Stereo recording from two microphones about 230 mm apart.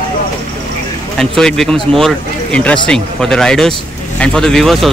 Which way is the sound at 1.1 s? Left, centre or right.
Centre.